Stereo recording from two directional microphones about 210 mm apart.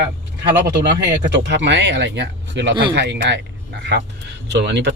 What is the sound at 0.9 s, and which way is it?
Speech, 55° right (ahead or behind).